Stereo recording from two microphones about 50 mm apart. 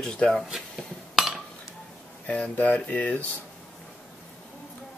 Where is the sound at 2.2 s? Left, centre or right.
Left.